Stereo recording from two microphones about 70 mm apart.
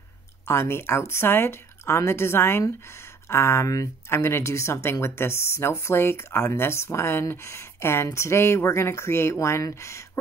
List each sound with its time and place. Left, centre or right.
0.5 s speech: left